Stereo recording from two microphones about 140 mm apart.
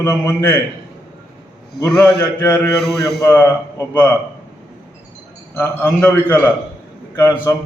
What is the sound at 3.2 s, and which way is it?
Speech, 25° left (ahead or behind).